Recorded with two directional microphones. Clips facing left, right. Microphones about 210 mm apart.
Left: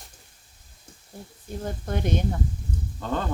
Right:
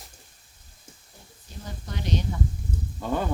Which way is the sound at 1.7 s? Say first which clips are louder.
Left 4 dB; 55° left (ahead or behind).